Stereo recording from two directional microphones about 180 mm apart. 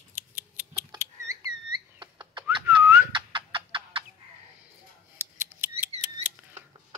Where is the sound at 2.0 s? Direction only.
25° right (ahead or behind).